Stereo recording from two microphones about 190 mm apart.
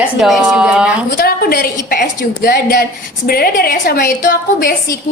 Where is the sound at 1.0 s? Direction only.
55° left (ahead or behind).